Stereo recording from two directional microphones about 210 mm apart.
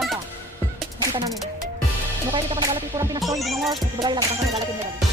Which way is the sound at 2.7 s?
20° right (ahead or behind).